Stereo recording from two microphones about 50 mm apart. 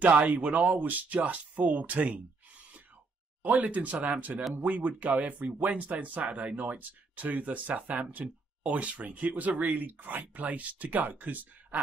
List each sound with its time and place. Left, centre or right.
0.0 s speech: right